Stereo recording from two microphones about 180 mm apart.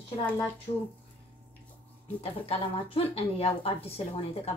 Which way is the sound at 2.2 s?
30° left (ahead or behind).